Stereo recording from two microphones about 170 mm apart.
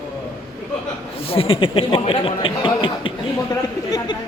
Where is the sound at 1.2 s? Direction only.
35° left (ahead or behind).